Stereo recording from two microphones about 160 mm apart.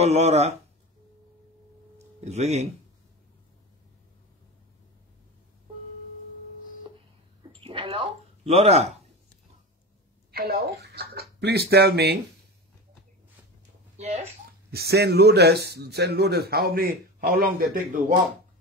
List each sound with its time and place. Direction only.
0.0 s speech: 40° right (ahead or behind)
2.0 s a sound: 45° right (ahead or behind)
7.6 s a sound: 35° right (ahead or behind)
10.3 s speech: 70° right (ahead or behind)
13.9 s speech: 45° right (ahead or behind)
14.7 s a man's voice: 80° right; by 18.1 s 55° right (ahead or behind)